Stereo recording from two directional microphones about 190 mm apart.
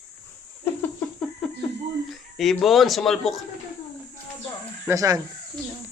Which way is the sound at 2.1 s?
Centre (ahead or behind).